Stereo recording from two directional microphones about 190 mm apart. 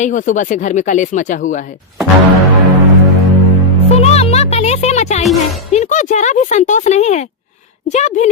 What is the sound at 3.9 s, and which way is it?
Music, 35° left (ahead or behind).